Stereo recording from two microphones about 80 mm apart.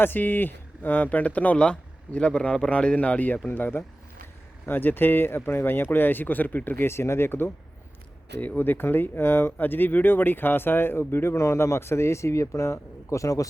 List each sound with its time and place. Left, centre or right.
0.0 s speech: left